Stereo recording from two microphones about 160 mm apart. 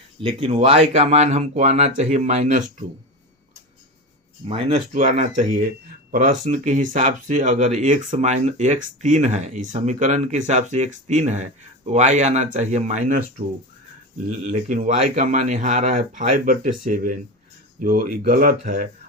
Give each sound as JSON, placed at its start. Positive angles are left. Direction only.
{"t": 0.2, "sound": "speech", "side_deg": -40}
{"t": 4.4, "sound": "speech", "side_deg": -35}
{"t": 14.3, "sound": "speech", "side_deg": -55}